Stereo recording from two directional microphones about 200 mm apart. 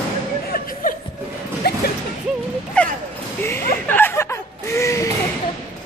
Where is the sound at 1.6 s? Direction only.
55° left (ahead or behind).